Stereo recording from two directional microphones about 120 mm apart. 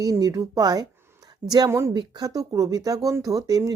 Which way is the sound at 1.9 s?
35° right (ahead or behind).